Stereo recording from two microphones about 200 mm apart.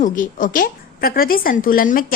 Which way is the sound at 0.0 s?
40° left (ahead or behind).